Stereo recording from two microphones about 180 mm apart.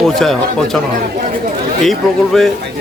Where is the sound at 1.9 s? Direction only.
Centre (ahead or behind).